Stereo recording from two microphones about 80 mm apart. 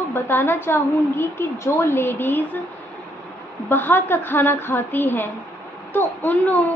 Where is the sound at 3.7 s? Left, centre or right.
Left.